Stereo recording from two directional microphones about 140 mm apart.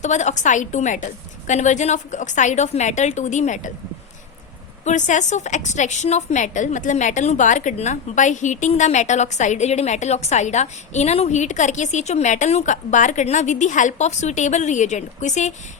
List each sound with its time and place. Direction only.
0.0 s a woman's voice: 60° left (ahead or behind)
4.9 s a woman's voice: 60° left (ahead or behind)